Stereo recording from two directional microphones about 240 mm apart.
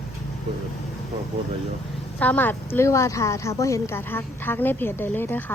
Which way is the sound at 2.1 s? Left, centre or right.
Centre.